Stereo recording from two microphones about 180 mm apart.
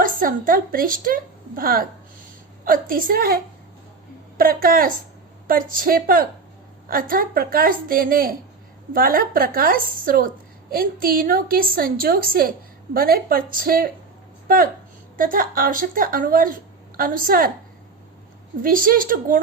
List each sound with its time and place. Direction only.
0.0 s a woman's voice: 50° right (ahead or behind)
18.6 s a woman's voice: 50° right (ahead or behind)